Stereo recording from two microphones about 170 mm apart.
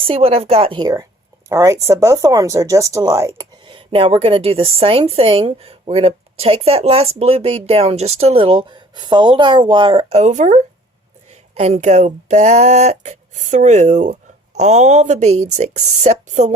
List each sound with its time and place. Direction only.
0.0 s speech: 35° right (ahead or behind)